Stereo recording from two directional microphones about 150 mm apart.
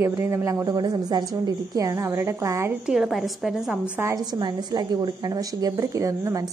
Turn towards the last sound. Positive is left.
turn(degrees=-20)  # may be behind; listen again after turning